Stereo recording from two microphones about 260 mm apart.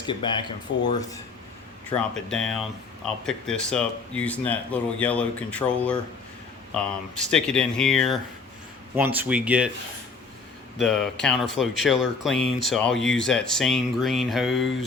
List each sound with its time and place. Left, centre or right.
0.0 s speech: centre
1.9 s speech: centre
10.8 s speech: centre